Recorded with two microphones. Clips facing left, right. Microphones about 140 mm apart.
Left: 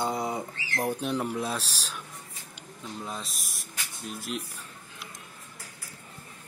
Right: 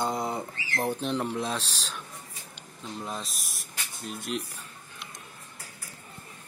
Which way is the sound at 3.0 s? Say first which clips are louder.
Right 2 dB; centre (ahead or behind).